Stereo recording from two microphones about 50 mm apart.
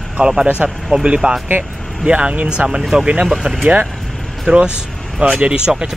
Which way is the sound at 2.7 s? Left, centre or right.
Centre.